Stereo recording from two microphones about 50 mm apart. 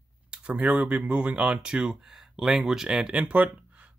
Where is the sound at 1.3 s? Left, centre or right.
Centre.